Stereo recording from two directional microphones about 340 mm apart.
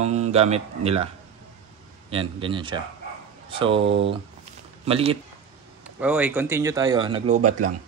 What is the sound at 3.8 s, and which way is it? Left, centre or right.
Speech, right.